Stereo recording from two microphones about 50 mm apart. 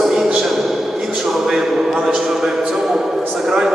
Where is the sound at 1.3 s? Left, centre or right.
Centre.